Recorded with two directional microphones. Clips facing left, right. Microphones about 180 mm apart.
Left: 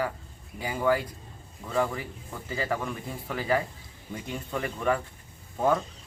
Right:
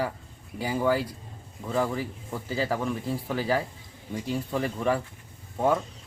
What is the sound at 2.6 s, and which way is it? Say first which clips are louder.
Speech: right 3 dB; 30° right (ahead or behind).